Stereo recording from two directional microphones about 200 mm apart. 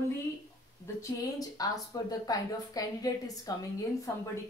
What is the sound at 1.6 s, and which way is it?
A woman's voice, 20° left (ahead or behind).